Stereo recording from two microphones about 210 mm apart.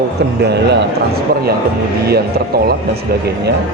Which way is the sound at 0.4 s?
50° right (ahead or behind).